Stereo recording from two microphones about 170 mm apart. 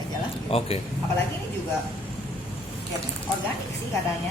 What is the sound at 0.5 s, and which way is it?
Speech, 35° left (ahead or behind).